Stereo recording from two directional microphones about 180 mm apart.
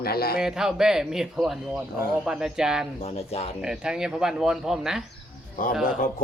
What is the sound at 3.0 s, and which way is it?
Speech, 35° left (ahead or behind).